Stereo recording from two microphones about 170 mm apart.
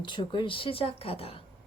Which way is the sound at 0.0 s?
30° left (ahead or behind).